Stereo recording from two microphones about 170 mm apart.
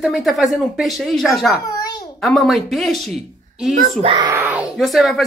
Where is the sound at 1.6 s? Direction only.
25° left (ahead or behind).